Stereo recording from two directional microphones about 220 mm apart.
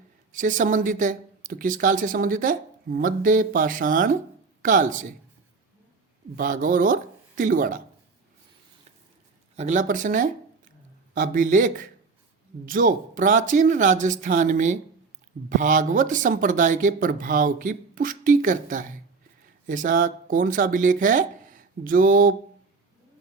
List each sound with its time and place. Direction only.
0.3 s speech: 35° right (ahead or behind)
6.3 s speech: 40° right (ahead or behind)
9.6 s speech: 35° right (ahead or behind)